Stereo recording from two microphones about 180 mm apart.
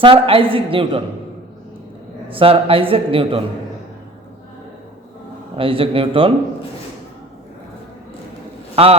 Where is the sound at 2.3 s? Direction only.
30° right (ahead or behind).